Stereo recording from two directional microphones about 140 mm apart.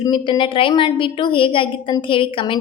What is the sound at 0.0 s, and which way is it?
A woman's voice, 35° left (ahead or behind).